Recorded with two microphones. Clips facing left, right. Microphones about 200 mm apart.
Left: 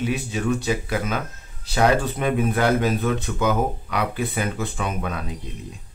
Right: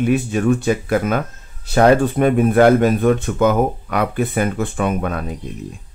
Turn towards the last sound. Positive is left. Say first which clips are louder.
# right 7 dB
turn(degrees=-50)  # may be behind; listen again after turning